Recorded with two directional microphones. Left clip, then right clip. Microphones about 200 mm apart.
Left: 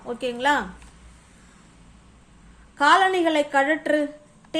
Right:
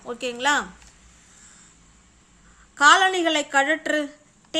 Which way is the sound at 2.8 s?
20° right (ahead or behind).